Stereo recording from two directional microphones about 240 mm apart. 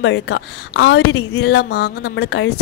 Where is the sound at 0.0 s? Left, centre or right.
Left.